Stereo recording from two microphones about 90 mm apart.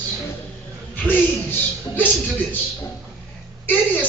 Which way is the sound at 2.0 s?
20° left (ahead or behind).